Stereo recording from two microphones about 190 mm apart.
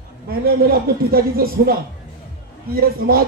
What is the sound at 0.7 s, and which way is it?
Speech, 50° right (ahead or behind).